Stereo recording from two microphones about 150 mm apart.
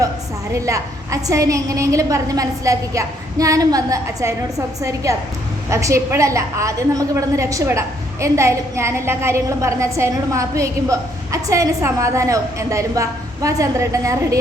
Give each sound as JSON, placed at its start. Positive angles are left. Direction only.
{"t": 0.5, "sound": "a woman's voice", "side_deg": -20}